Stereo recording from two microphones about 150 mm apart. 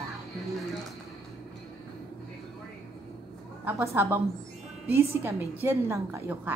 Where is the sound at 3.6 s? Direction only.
15° right (ahead or behind).